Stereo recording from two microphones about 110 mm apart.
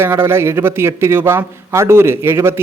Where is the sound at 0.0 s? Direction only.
20° right (ahead or behind).